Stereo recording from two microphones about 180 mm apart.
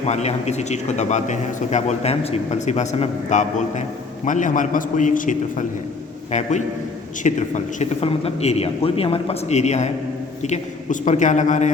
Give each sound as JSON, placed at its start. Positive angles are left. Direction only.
{"t": 0.0, "sound": "a man's voice", "side_deg": 35}